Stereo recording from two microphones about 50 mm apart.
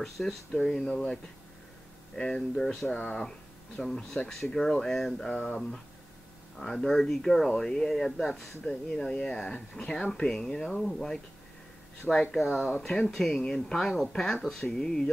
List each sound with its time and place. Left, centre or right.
0.0 s speech: centre
5.3 s speech: left
6.6 s speech: centre
12.4 s speech: centre